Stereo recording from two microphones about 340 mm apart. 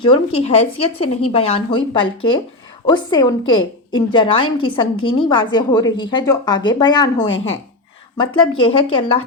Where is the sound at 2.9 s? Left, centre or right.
Centre.